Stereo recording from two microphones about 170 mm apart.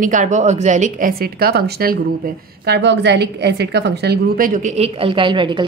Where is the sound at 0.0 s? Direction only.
50° right (ahead or behind).